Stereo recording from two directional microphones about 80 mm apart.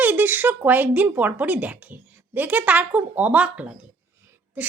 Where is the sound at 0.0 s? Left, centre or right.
Right.